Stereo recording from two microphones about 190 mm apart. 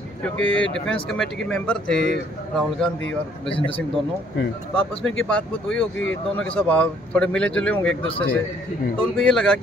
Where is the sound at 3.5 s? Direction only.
30° left (ahead or behind).